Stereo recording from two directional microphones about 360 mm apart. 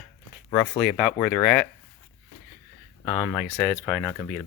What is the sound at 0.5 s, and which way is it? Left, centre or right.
Speech, centre.